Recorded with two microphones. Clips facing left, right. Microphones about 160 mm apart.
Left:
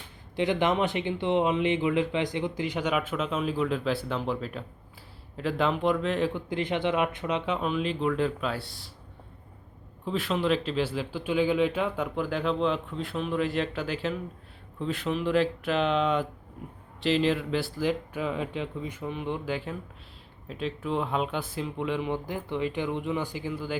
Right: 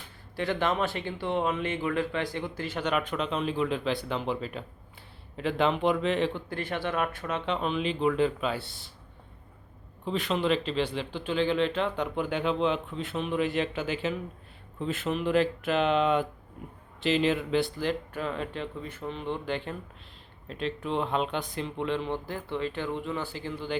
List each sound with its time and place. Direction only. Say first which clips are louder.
0.3 s speech: left 3 dB; 20° left (ahead or behind); by 6.3 s centre (ahead or behind)
6.3 s speech: left 4 dB; 15° left (ahead or behind); by 8.9 s centre (ahead or behind)
10.1 s speech: even; centre (ahead or behind)